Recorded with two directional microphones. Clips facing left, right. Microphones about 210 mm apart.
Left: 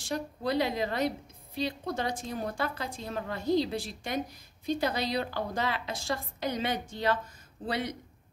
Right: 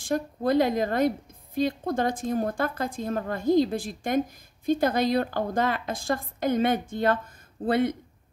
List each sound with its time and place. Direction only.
0.0 s a woman's voice: 50° right (ahead or behind)